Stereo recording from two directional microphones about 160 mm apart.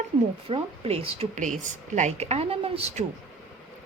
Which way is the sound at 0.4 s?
35° right (ahead or behind).